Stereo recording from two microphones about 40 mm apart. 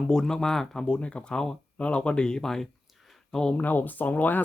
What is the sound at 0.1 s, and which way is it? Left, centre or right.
Speech, centre.